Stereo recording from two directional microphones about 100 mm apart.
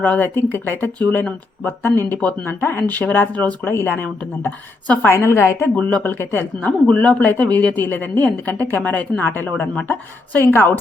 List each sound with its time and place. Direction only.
0.0 s speech: 15° left (ahead or behind)
5.7 s speech: 15° left (ahead or behind)